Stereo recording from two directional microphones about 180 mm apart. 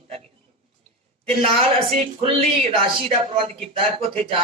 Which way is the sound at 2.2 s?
30° right (ahead or behind).